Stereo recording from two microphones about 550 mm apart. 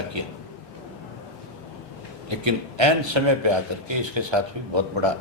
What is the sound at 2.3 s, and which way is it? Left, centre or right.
A man's voice, right.